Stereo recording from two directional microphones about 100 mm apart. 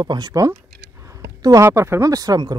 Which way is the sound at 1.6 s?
25° right (ahead or behind).